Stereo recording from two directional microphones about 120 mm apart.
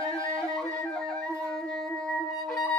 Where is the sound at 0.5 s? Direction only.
5° left (ahead or behind).